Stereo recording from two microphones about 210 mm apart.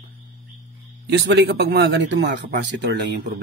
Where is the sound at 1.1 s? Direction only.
55° right (ahead or behind).